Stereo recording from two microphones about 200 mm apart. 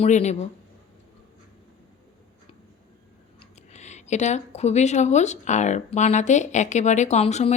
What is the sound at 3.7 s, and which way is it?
Speech, 35° left (ahead or behind).